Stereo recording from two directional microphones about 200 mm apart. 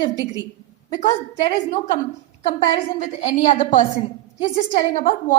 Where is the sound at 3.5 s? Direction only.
35° left (ahead or behind).